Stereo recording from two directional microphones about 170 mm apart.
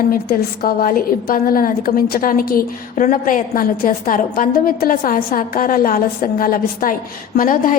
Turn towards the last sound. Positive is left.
turn(degrees=55)  # may be behind; listen again after turning